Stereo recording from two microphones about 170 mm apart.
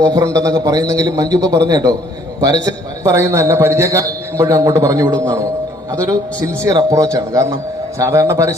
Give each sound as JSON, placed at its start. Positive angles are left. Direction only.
{"t": 0.0, "sound": "a man's voice", "side_deg": -20}